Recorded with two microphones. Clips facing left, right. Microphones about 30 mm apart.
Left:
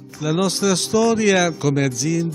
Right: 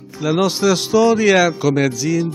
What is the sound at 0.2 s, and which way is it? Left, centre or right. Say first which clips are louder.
Speech: right 3 dB; centre.